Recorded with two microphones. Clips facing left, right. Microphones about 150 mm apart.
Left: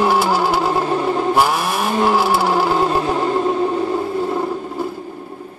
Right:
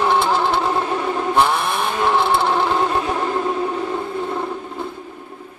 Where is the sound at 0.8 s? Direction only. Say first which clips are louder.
Left 3 dB; 25° left (ahead or behind).